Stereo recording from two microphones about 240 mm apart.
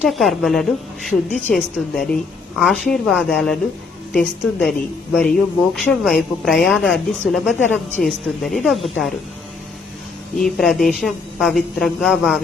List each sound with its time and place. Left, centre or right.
0.0 s a woman's voice: centre
5.7 s a woman's voice: centre
10.4 s a woman's voice: centre